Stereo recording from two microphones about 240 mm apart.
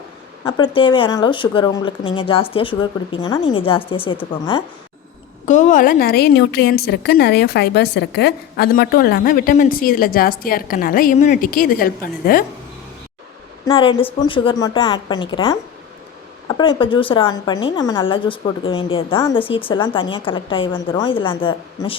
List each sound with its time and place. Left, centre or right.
0.4 s a woman's voice: centre
5.5 s a woman's voice: left
13.7 s a woman's voice: left